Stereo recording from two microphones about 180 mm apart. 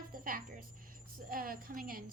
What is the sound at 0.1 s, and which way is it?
Music, 50° right (ahead or behind).